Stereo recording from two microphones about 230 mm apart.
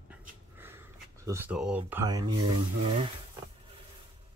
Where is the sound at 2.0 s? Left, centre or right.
Centre.